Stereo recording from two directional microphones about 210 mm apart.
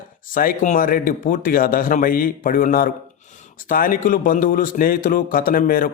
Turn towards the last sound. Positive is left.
turn(degrees=40)  # may be behind; listen again after turning